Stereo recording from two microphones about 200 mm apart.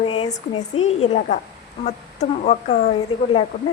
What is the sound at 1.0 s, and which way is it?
Speech, 35° left (ahead or behind).